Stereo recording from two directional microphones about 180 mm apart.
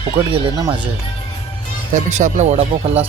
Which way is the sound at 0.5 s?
20° right (ahead or behind).